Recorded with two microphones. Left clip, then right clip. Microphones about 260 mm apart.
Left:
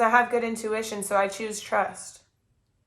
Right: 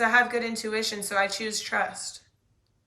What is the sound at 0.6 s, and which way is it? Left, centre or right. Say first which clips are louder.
Speech: even; centre.